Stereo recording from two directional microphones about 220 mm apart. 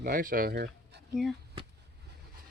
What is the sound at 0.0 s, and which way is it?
Speech, 40° right (ahead or behind).